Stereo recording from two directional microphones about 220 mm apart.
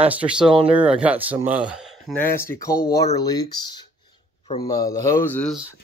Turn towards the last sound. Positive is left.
turn(degrees=5)  # may be behind; listen again after turning